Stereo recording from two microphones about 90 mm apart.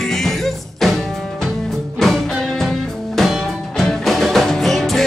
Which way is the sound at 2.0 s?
5° left (ahead or behind).